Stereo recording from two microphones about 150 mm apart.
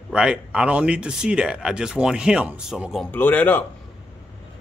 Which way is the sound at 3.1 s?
10° left (ahead or behind).